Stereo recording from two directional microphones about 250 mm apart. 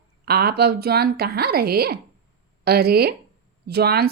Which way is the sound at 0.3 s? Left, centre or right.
Right.